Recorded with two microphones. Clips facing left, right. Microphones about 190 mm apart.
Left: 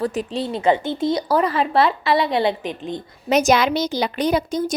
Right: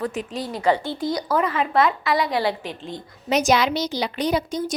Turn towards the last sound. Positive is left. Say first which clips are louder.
# left 3 dB
turn(degrees=50)  # may be behind; listen again after turning